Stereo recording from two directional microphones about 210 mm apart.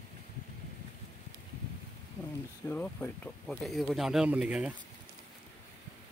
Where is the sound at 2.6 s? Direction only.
10° left (ahead or behind).